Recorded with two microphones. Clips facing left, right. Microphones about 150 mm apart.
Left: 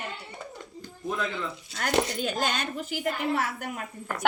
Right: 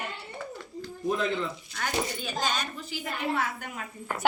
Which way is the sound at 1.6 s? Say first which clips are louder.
Left 9 dB; 75° left (ahead or behind).